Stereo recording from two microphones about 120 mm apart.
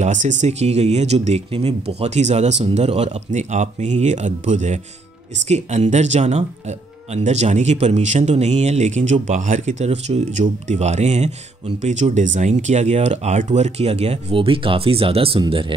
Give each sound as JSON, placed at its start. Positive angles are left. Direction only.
{"t": 0.0, "sound": "speech", "side_deg": -90}
{"t": 14.3, "sound": "speech", "side_deg": -50}